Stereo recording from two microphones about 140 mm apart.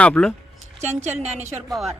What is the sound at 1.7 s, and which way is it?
Speech, centre (ahead or behind).